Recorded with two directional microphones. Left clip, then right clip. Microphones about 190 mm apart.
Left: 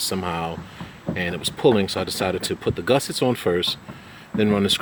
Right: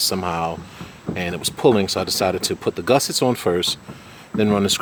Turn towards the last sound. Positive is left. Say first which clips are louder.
# right 1 dB
turn(degrees=-5)  # may be behind; listen again after turning